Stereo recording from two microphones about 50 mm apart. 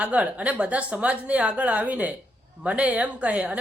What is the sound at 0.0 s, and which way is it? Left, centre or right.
Speech, right.